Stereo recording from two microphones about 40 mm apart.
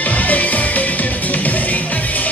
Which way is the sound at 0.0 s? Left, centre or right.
Left.